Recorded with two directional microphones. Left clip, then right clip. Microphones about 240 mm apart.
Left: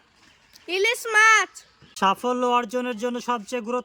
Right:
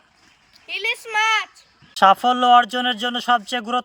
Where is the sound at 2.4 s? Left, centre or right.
Centre.